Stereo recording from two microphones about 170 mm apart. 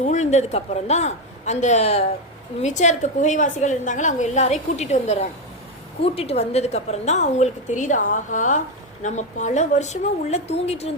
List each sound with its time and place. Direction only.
0.0 s a woman's voice: 45° left (ahead or behind)